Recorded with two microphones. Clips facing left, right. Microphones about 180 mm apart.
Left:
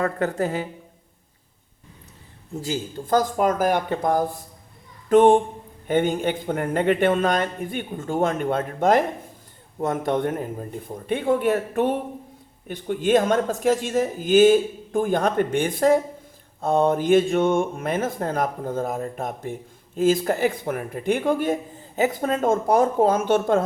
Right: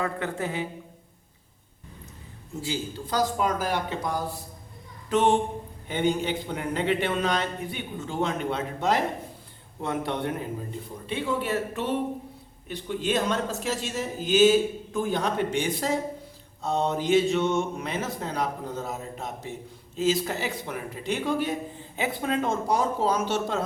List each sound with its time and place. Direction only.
0.0 s speech: 40° left (ahead or behind)
2.6 s speech: 45° left (ahead or behind)